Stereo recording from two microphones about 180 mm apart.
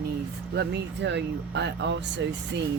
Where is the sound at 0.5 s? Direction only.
65° right (ahead or behind).